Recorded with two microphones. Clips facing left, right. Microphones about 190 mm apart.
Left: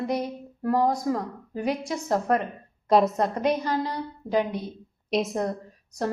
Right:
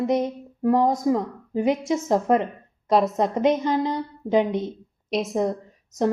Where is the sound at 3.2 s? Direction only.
20° right (ahead or behind).